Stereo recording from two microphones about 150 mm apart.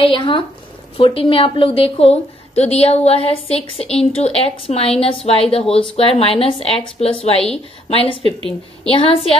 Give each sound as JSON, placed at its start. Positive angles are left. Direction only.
{"t": 0.0, "sound": "a woman's voice", "side_deg": 35}
{"t": 8.2, "sound": "speech", "side_deg": -40}
{"t": 8.8, "sound": "a woman's voice", "side_deg": 40}